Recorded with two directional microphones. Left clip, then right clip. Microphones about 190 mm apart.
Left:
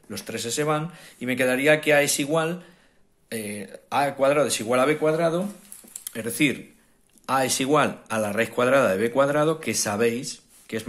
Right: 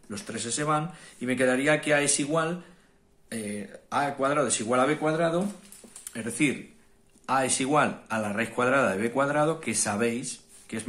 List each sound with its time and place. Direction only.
0.1 s speech: 25° left (ahead or behind)